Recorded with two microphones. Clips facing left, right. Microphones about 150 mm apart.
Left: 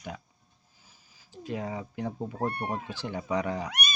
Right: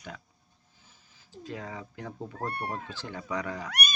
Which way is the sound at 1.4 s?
20° left (ahead or behind).